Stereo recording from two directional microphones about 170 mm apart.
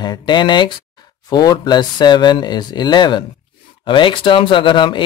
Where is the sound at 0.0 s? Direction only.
25° left (ahead or behind).